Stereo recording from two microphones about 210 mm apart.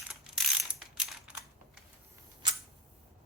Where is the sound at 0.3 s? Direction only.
Centre (ahead or behind).